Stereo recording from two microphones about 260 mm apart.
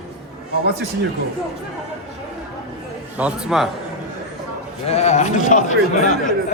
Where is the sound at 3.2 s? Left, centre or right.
Centre.